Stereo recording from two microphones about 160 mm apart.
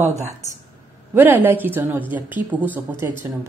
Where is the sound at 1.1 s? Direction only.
10° right (ahead or behind).